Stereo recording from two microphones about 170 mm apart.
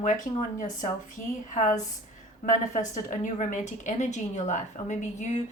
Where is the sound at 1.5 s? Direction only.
45° left (ahead or behind).